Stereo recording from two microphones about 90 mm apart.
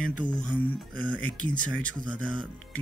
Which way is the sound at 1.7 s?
10° left (ahead or behind).